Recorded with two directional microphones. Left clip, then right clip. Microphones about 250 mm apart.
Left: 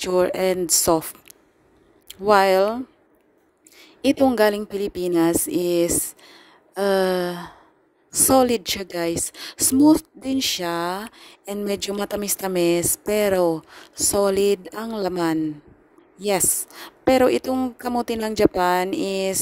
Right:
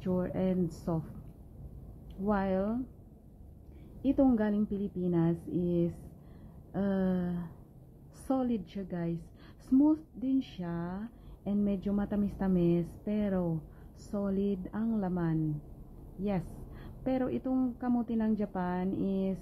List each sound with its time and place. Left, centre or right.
0.0 s a woman's voice: left
2.2 s a woman's voice: left
4.0 s a woman's voice: left